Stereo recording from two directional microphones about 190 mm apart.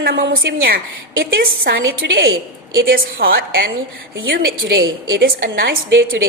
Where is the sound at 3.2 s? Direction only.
50° right (ahead or behind).